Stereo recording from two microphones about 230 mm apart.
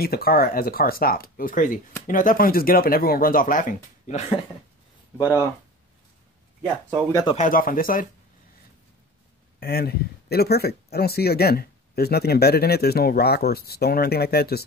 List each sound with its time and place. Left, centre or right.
0.0 s speech: left
5.1 s speech: centre
6.6 s speech: centre
7.1 s speech: centre
7.3 s speech: left
9.6 s speech: left